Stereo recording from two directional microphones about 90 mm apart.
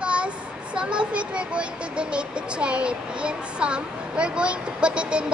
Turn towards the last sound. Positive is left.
turn(degrees=-10)  # may be behind; listen again after turning